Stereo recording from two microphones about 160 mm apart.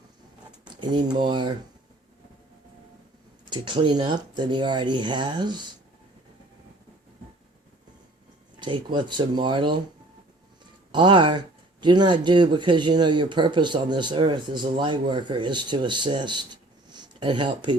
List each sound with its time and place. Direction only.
0.8 s speech: 30° right (ahead or behind)
3.5 s speech: 30° right (ahead or behind)
8.5 s speech: 30° right (ahead or behind)
10.9 s speech: 30° right (ahead or behind)